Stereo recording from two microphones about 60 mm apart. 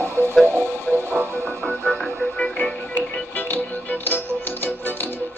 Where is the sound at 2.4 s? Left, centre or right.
Left.